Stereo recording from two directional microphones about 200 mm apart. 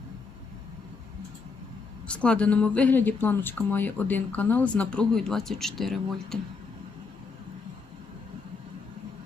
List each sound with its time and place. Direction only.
2.0 s speech: 5° left (ahead or behind)